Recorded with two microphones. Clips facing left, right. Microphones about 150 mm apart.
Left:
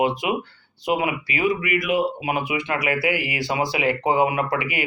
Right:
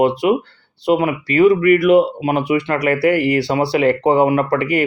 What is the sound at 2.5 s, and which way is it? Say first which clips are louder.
Speech: right 9 dB; 50° right (ahead or behind).